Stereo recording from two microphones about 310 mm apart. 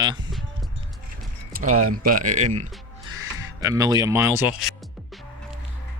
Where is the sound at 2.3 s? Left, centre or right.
Right.